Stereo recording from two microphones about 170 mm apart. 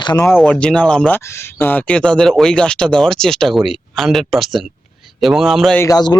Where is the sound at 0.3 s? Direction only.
5° left (ahead or behind).